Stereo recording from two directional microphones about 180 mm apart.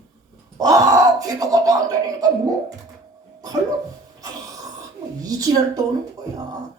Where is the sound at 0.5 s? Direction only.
20° right (ahead or behind).